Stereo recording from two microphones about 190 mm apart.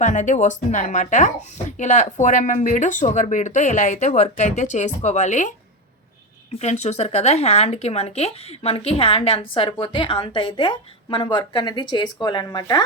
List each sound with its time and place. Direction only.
0.0 s speech: 40° left (ahead or behind); by 12.8 s 20° left (ahead or behind)